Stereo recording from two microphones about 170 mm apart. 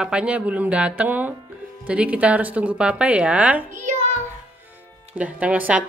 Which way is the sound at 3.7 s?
45° right (ahead or behind).